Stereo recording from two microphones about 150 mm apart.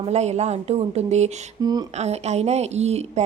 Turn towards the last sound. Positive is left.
turn(degrees=-45)  # may be behind; listen again after turning